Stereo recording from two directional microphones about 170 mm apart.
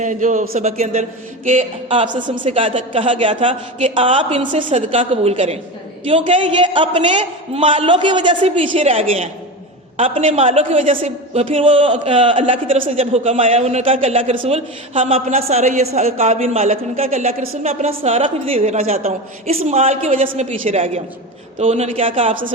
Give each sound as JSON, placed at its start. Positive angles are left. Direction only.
{"t": 0.0, "sound": "a man's voice", "side_deg": -50}
{"t": 2.2, "sound": "a woman's voice", "side_deg": -30}
{"t": 12.7, "sound": "a woman's voice", "side_deg": -45}